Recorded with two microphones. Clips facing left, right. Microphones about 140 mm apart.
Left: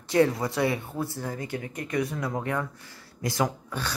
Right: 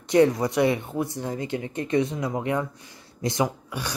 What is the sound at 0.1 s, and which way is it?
Speech, 20° right (ahead or behind).